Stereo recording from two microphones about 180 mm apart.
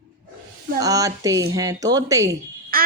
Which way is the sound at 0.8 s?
20° right (ahead or behind).